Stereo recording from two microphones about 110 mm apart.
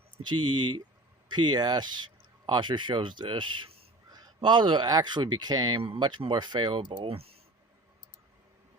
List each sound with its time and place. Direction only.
0.2 s speech: 45° right (ahead or behind); by 7.3 s 60° right (ahead or behind)